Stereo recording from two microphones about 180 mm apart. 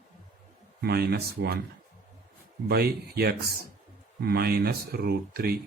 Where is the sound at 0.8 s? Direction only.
60° right (ahead or behind).